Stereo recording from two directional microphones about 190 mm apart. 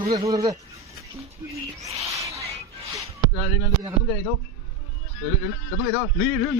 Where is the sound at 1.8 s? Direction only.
15° right (ahead or behind).